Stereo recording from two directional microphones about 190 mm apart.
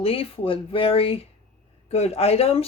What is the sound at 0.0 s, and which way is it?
Speech, 30° left (ahead or behind).